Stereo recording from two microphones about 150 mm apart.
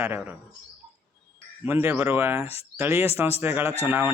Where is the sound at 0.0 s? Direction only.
15° right (ahead or behind).